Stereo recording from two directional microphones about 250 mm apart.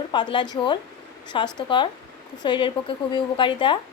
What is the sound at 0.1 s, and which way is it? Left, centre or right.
A woman's voice, centre.